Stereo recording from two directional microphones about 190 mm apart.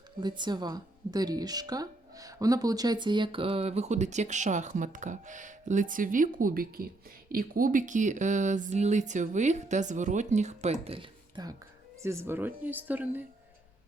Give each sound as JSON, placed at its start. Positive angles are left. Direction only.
{"t": 0.2, "sound": "speech", "side_deg": -25}
{"t": 12.0, "sound": "speech", "side_deg": -15}